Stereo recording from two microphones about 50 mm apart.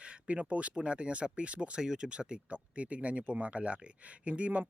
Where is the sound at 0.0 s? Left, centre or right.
Right.